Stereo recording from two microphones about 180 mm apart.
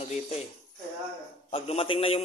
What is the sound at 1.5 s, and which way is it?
Speech, 35° left (ahead or behind).